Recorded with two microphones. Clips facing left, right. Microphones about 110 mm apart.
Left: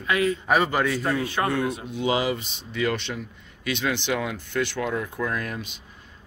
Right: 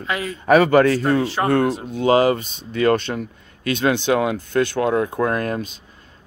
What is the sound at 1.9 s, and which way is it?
Speech, 50° right (ahead or behind).